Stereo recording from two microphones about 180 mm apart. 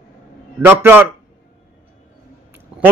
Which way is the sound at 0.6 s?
10° right (ahead or behind).